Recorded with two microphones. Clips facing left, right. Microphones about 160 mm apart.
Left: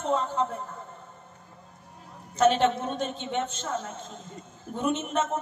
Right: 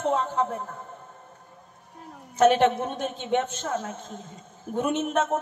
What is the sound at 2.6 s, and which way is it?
Speech, 55° right (ahead or behind).